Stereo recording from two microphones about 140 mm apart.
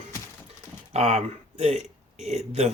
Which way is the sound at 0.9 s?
50° right (ahead or behind).